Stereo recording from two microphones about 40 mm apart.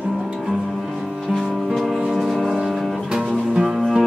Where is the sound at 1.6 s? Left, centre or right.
Centre.